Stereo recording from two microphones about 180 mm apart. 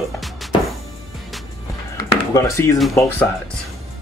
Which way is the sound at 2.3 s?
15° left (ahead or behind).